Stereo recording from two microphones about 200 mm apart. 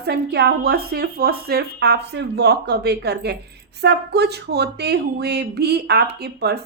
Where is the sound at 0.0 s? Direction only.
55° right (ahead or behind).